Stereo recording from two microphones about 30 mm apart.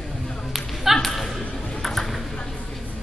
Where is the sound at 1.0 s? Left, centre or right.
Centre.